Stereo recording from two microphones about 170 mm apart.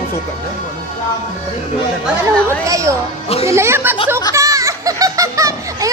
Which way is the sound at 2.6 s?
20° right (ahead or behind).